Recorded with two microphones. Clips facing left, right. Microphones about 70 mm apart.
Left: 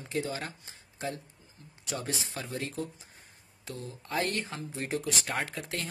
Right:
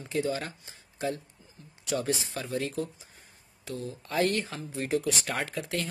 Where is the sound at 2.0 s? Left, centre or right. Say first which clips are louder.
Right 5 dB; centre.